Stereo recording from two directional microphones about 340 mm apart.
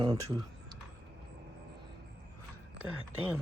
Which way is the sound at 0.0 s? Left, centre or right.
Centre.